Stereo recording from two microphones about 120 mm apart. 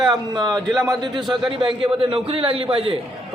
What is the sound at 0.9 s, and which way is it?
A man's voice, 40° right (ahead or behind).